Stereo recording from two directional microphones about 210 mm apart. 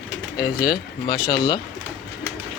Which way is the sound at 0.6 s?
20° left (ahead or behind).